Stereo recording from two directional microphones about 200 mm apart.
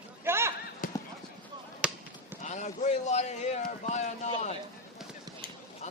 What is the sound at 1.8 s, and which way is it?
Basketball bounce, 5° right (ahead or behind).